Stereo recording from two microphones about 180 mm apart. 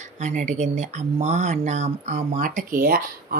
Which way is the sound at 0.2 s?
45° right (ahead or behind).